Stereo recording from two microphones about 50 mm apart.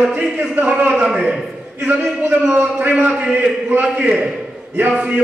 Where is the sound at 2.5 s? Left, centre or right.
Right.